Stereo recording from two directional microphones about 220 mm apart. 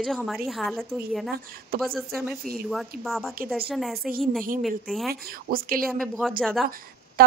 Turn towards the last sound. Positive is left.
turn(degrees=-45)  # may be behind; listen again after turning